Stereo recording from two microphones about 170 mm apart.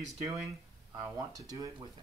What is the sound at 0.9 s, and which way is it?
Speech, 20° right (ahead or behind).